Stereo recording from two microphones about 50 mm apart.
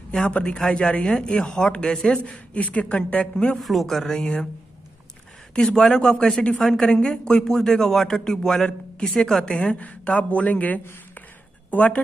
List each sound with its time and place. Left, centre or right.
0.3 s a man's voice: centre
3.6 s a man's voice: centre
5.5 s a man's voice: centre
9.8 s speech: left